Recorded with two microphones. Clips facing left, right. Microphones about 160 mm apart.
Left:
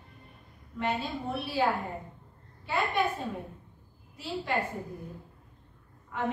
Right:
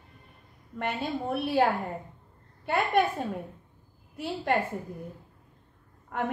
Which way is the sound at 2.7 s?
55° right (ahead or behind).